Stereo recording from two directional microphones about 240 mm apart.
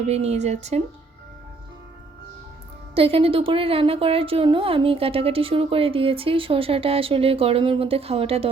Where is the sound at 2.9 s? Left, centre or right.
Right.